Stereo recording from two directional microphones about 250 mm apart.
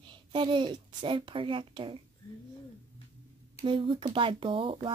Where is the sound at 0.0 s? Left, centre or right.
Centre.